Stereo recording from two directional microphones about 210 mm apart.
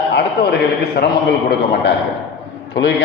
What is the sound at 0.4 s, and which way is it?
A man's voice, 50° left (ahead or behind).